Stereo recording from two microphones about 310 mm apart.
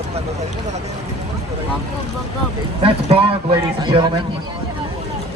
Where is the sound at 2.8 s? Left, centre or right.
Centre.